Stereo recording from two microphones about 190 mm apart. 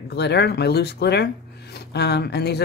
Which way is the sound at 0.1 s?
60° left (ahead or behind).